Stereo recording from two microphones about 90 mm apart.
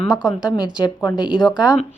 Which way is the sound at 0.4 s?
50° left (ahead or behind).